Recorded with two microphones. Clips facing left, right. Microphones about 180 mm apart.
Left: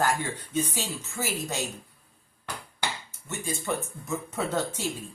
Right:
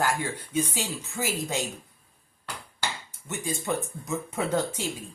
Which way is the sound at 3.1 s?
15° right (ahead or behind).